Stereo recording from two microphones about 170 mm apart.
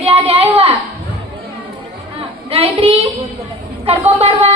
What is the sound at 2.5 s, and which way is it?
A woman's voice, 35° right (ahead or behind).